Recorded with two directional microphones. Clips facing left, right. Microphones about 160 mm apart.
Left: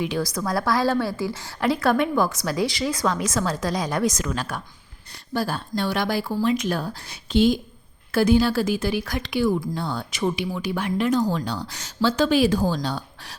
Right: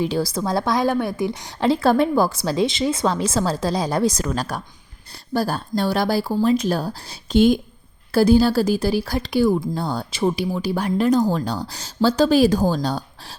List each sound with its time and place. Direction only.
0.0 s a woman's voice: 30° right (ahead or behind); by 7.6 s 50° right (ahead or behind)
8.1 s speech: 35° right (ahead or behind)